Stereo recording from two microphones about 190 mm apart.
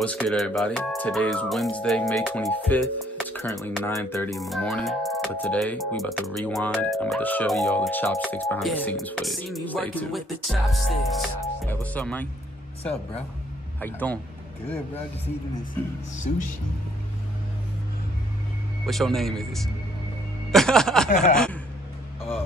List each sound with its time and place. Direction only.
0.0 s speech: 5° left (ahead or behind)
13.7 s speech: 10° left (ahead or behind)
18.9 s speech: centre (ahead or behind)
21.1 s speech: 40° left (ahead or behind)